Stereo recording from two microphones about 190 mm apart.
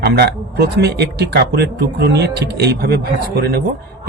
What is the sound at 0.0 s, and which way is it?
A man's voice, 55° right (ahead or behind).